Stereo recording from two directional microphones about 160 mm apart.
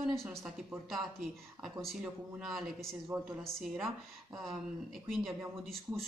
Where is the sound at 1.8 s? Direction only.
Centre (ahead or behind).